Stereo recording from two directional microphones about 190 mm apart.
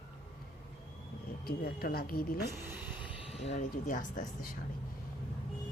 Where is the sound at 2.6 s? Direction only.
10° right (ahead or behind).